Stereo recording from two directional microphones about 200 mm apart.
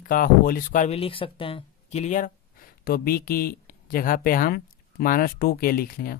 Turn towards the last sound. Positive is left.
turn(degrees=45)  # may be behind; listen again after turning